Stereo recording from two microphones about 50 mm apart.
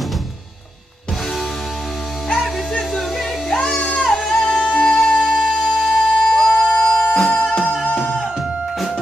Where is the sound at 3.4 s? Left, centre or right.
Centre.